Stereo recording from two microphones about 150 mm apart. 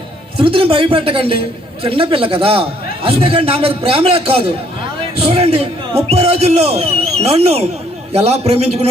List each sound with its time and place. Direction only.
0.3 s a man's voice: 35° right (ahead or behind)